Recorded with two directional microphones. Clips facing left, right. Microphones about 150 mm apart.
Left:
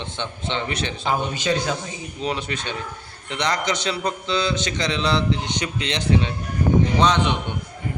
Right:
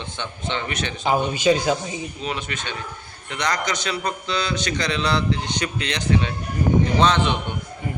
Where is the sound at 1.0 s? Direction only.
15° right (ahead or behind).